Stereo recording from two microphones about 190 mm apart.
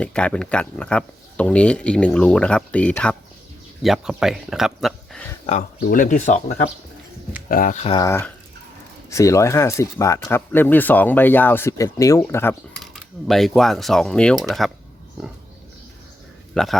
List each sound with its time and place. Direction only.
0.0 s speech: 5° left (ahead or behind)
5.5 s speech: 45° left (ahead or behind)
7.9 s speech: 15° left (ahead or behind)
16.6 s speech: 5° left (ahead or behind)